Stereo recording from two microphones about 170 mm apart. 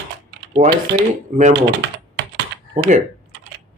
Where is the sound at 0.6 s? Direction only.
50° right (ahead or behind).